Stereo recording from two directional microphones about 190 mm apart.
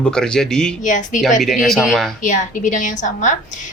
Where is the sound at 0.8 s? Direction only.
40° left (ahead or behind).